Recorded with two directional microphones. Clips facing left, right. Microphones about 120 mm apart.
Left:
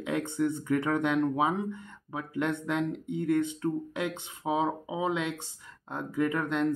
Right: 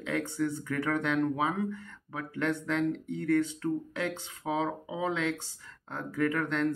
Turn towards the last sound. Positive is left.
turn(degrees=15)  # may be behind; listen again after turning